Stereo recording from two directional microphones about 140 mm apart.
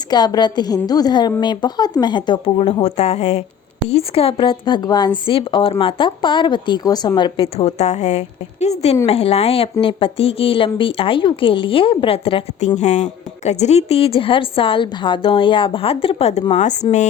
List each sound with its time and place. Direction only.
0.1 s a woman's voice: 30° left (ahead or behind); by 16.7 s 55° left (ahead or behind)